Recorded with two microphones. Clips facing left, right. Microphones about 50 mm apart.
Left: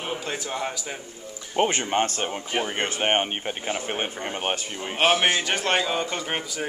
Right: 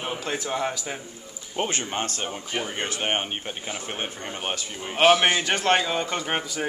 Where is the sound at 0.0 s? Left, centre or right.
Centre.